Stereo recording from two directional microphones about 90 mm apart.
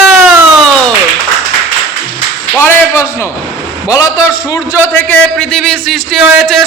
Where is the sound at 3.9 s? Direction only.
45° left (ahead or behind).